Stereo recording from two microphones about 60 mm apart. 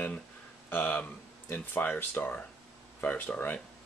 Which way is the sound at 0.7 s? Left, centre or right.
Left.